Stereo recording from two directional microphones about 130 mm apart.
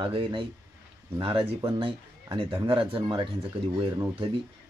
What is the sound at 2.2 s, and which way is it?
Speech, 40° right (ahead or behind).